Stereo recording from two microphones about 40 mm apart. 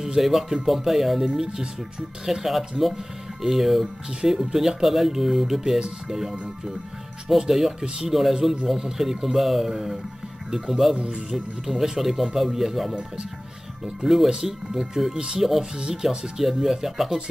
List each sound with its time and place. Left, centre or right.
0.0 s speech: centre
7.3 s speech: centre
11.0 s speech: right
11.3 s speech: centre
14.0 s speech: centre
14.3 s speech: centre